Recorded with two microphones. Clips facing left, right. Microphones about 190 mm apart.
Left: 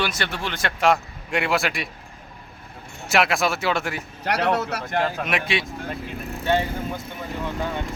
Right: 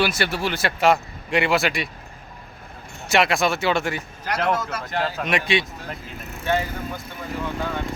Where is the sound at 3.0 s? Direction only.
Centre (ahead or behind).